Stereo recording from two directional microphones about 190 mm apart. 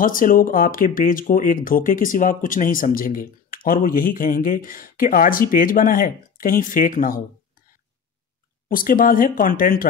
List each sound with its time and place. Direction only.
0.0 s speech: 45° left (ahead or behind)
8.6 s speech: 45° left (ahead or behind)